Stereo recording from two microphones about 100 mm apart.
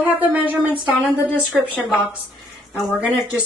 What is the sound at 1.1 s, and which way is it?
Speech, 25° left (ahead or behind).